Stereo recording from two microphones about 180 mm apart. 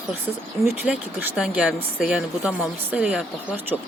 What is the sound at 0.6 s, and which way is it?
Speech, 10° right (ahead or behind).